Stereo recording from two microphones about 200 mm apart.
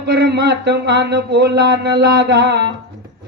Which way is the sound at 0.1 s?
55° right (ahead or behind).